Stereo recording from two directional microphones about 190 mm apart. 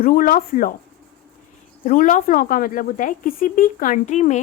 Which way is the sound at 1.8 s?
45° left (ahead or behind).